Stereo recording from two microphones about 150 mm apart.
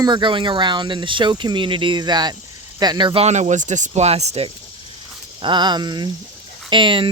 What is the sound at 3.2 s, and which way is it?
Speech, 50° right (ahead or behind).